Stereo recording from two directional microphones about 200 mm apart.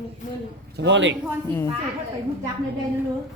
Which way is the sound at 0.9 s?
65° right (ahead or behind).